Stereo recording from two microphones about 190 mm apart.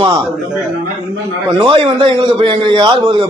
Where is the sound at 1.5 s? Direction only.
30° right (ahead or behind).